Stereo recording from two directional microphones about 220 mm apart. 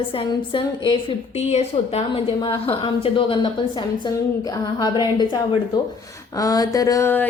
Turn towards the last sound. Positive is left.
turn(degrees=10)  # may be behind; listen again after turning